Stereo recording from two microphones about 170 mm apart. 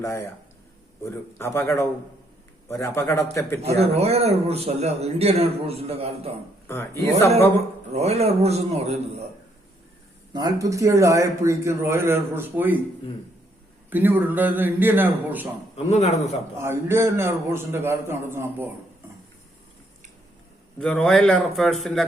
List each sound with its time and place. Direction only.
1.0 s a man's voice: 15° left (ahead or behind)
3.8 s a man's voice: 35° right (ahead or behind)
7.9 s a man's voice: 40° right (ahead or behind)
10.3 s a man's voice: 20° right (ahead or behind)
13.9 s a man's voice: 10° right (ahead or behind)
15.7 s speech: 40° left (ahead or behind)
16.6 s a man's voice: 15° right (ahead or behind)
20.7 s a man's voice: 5° left (ahead or behind)